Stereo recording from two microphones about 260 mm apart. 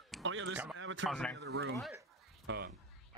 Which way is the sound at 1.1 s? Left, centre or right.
Centre.